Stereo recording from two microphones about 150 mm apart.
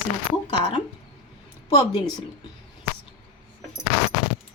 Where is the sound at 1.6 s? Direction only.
25° left (ahead or behind).